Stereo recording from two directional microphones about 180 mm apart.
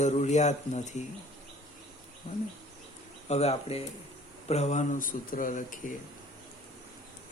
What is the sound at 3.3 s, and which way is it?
Speech, 35° left (ahead or behind).